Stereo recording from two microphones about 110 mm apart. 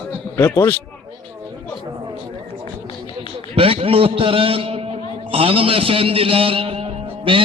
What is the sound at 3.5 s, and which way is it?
A man's voice, 60° right (ahead or behind).